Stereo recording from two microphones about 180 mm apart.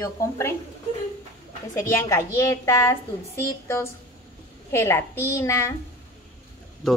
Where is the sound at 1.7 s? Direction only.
15° left (ahead or behind).